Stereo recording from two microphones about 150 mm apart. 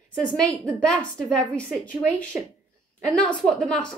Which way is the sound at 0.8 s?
5° left (ahead or behind).